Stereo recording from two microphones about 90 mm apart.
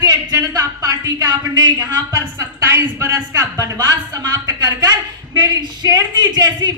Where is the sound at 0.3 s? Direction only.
45° right (ahead or behind).